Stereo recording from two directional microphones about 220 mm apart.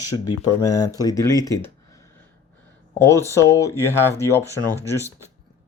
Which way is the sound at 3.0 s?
10° left (ahead or behind).